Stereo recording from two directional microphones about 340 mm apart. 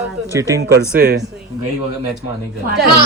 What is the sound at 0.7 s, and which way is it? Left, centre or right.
Speech, right.